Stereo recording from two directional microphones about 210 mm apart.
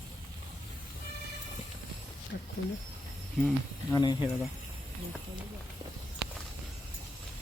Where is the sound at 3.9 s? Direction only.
20° left (ahead or behind).